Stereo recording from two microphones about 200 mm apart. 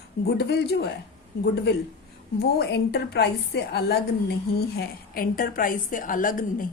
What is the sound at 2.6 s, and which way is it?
A woman's voice, 55° left (ahead or behind).